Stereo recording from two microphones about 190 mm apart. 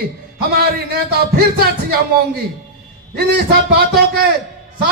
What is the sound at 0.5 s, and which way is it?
Speech, 55° right (ahead or behind).